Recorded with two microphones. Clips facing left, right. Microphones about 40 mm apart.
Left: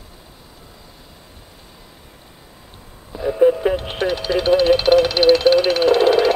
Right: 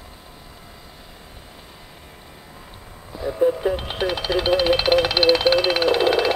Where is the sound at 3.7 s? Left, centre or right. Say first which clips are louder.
Left 3 dB; centre.